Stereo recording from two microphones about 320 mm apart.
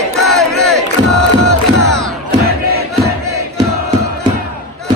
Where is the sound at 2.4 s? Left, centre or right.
Right.